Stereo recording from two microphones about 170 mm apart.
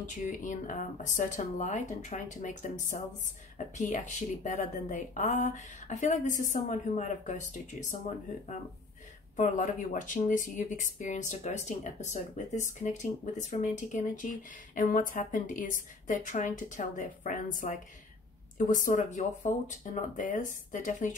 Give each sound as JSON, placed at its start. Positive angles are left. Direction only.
{"t": 0.1, "sound": "speech", "side_deg": 50}
{"t": 9.4, "sound": "speech", "side_deg": 50}